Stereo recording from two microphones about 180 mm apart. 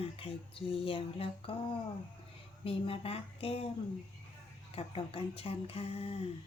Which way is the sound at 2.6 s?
30° left (ahead or behind).